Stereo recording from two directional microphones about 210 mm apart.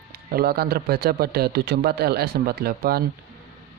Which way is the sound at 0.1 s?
45° right (ahead or behind).